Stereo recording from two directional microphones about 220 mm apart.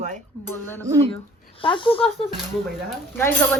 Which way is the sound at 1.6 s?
20° left (ahead or behind).